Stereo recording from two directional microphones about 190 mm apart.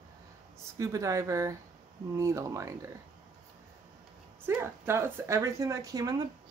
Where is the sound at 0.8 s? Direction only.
15° right (ahead or behind).